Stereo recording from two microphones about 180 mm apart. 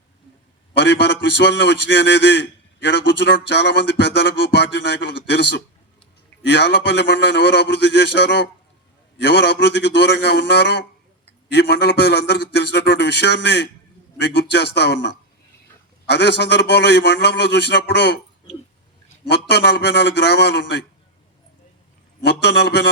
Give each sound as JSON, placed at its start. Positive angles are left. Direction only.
{"t": 0.7, "sound": "a man's voice", "side_deg": 70}
{"t": 19.3, "sound": "a man's voice", "side_deg": 70}
{"t": 22.2, "sound": "a man's voice", "side_deg": 70}